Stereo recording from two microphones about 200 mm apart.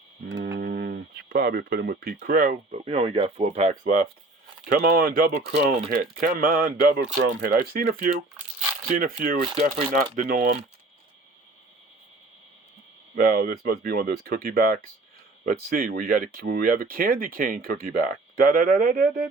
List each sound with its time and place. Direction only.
0.5 s speech: 50° right (ahead or behind)
2.8 s speech: 30° right (ahead or behind)
4.8 s speech: 55° right (ahead or behind)
5.3 s speech: 30° right (ahead or behind)
5.9 s speech: 45° right (ahead or behind)
13.1 s speech: 50° right (ahead or behind)